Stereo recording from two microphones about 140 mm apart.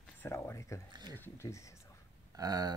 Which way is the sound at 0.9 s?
30° right (ahead or behind).